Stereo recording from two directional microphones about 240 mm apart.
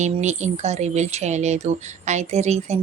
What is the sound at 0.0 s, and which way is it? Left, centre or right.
Speech, right.